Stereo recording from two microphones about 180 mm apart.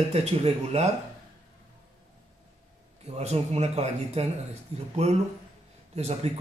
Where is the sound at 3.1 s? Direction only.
35° right (ahead or behind).